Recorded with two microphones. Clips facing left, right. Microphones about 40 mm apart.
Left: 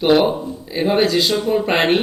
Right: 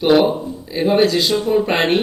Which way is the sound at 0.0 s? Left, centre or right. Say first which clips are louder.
Right 1 dB; centre.